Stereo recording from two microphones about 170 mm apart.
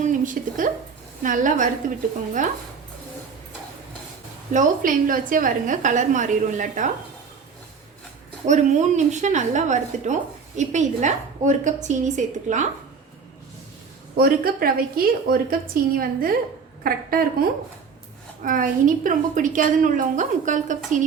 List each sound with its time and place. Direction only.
0.0 s a woman's voice: 50° right (ahead or behind)
4.5 s a woman's voice: 50° right (ahead or behind)
8.4 s a woman's voice: 45° right (ahead or behind)
14.2 s a woman's voice: 60° right (ahead or behind)
18.4 s a woman's voice: 55° right (ahead or behind)